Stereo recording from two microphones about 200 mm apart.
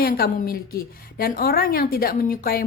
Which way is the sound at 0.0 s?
50° left (ahead or behind).